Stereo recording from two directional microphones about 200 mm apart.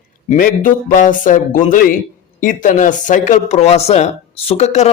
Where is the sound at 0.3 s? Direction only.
45° left (ahead or behind).